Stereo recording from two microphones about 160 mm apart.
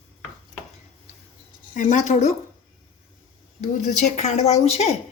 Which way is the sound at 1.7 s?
50° left (ahead or behind).